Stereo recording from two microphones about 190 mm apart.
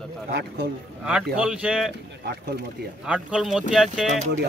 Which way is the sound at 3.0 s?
5° right (ahead or behind).